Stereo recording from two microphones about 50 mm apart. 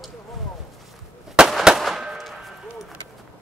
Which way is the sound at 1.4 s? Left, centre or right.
Centre.